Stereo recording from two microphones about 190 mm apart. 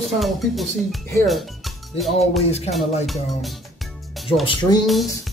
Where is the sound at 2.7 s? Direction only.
Centre (ahead or behind).